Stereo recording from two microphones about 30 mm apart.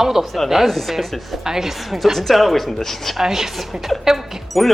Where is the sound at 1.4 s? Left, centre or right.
Centre.